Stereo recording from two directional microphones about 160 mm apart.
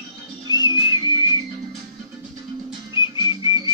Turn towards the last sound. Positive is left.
turn(degrees=25)  # may be behind; listen again after turning